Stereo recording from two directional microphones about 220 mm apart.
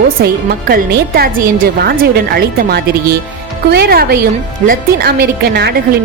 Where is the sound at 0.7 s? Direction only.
45° right (ahead or behind).